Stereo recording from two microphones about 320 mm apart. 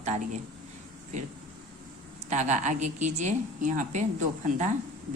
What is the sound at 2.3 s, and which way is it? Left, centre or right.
A woman's voice, right.